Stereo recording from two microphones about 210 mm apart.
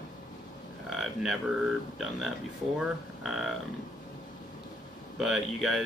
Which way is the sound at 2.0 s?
Centre (ahead or behind).